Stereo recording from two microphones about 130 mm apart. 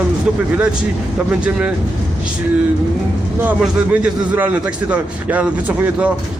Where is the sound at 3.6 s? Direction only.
10° right (ahead or behind).